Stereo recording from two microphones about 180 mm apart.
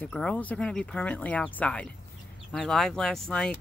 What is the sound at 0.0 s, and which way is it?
Speech, 5° left (ahead or behind).